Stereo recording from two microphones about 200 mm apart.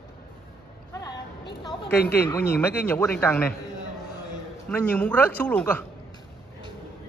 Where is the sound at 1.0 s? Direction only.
25° left (ahead or behind).